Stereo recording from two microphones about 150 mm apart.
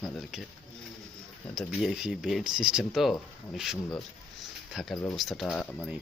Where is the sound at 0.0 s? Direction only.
Centre (ahead or behind).